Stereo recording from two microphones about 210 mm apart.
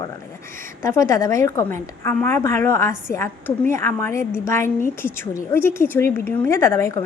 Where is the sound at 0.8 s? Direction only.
15° left (ahead or behind).